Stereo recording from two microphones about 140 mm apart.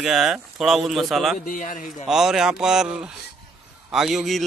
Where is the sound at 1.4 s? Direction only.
75° left (ahead or behind).